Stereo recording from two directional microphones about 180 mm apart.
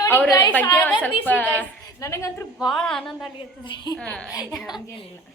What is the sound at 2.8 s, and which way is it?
Speech, centre (ahead or behind).